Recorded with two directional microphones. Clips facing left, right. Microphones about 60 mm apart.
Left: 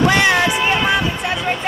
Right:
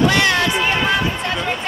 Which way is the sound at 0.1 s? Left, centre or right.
Centre.